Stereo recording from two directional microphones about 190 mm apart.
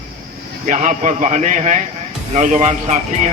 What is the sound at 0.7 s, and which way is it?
Speech, 40° right (ahead or behind).